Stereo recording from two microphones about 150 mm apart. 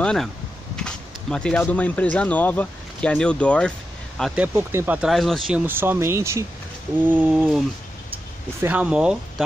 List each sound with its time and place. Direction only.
0.0 s speech: 5° left (ahead or behind)
4.4 s speech: 15° right (ahead or behind)
5.7 s speech: 15° right (ahead or behind)
7.1 s a sound: 5° right (ahead or behind)
8.5 s speech: 10° right (ahead or behind)